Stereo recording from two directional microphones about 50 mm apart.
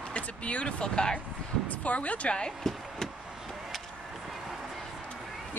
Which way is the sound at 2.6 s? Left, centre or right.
Centre.